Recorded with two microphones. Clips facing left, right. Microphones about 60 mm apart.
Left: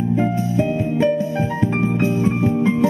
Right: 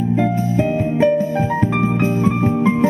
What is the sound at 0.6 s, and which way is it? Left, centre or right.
Music, right.